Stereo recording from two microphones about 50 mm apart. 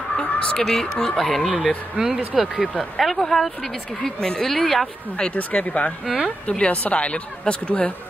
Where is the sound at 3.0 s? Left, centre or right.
Centre.